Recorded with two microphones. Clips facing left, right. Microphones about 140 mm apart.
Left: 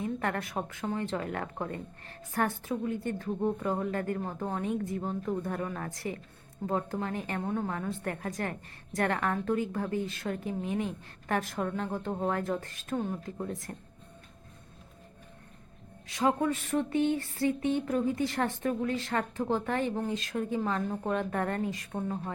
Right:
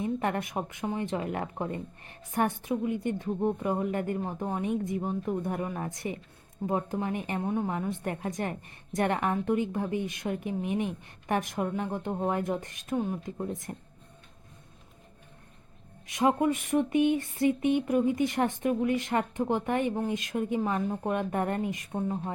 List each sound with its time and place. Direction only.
0.0 s a woman's voice: 20° right (ahead or behind)
16.0 s a woman's voice: 20° right (ahead or behind)